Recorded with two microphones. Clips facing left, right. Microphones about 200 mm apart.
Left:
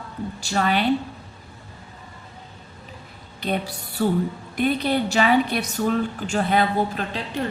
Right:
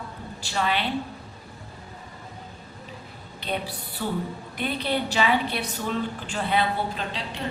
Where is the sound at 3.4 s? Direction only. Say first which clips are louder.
Left 4 dB; 45° left (ahead or behind).